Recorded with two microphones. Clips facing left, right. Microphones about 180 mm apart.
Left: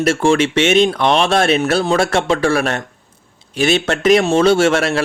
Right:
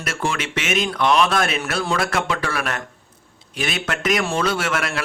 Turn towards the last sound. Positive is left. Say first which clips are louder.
# left 10 dB
turn(degrees=30)  # may be behind; listen again after turning